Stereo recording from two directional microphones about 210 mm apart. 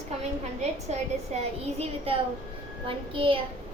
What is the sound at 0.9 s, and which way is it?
Speech, 30° right (ahead or behind).